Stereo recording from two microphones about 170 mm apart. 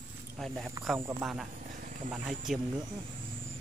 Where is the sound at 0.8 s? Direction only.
20° right (ahead or behind).